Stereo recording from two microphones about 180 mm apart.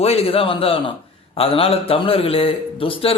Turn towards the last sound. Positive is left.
turn(degrees=30)  # may be behind; listen again after turning